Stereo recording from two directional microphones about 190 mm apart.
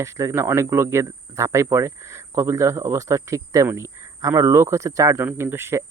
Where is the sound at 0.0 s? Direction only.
15° right (ahead or behind).